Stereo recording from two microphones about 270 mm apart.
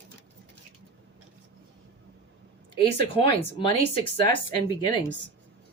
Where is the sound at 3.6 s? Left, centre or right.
Centre.